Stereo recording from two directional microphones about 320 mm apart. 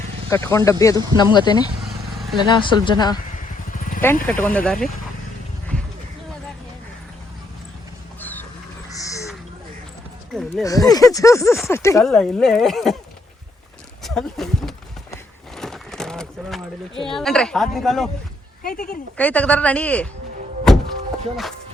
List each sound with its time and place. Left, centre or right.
0.3 s speech: centre
8.2 s a sound: centre
10.3 s speech: centre
14.0 s walk: centre
17.0 s speech: centre
18.6 s speech: left
18.9 s speech: centre